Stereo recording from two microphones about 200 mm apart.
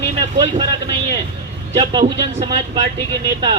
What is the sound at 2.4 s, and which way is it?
Speech, 25° right (ahead or behind).